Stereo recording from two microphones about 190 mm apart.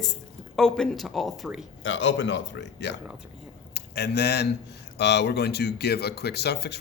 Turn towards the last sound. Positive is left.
turn(degrees=60)  # may be behind; listen again after turning